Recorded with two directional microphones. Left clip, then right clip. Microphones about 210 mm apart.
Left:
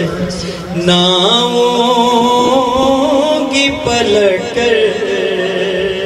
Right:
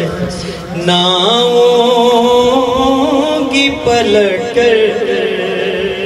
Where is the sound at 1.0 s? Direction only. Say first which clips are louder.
Right 1 dB; 30° left (ahead or behind).